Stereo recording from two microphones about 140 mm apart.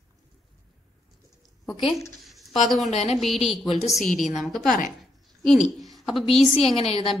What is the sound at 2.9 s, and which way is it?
Speech, 55° left (ahead or behind).